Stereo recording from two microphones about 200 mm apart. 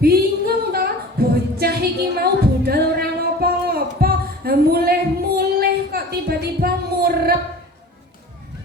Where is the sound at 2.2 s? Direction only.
50° right (ahead or behind).